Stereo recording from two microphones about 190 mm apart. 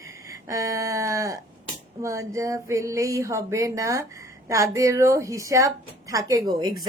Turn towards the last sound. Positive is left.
turn(degrees=-20)  # may be behind; listen again after turning